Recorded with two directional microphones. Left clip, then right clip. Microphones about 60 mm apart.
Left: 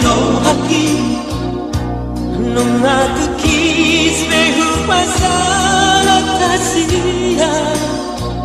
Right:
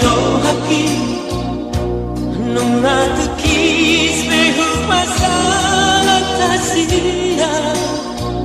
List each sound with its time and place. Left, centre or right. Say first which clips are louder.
2.8 s music: left 1 dB; right
6.4 s music: left 1 dB; centre
7.3 s music: left 2 dB; right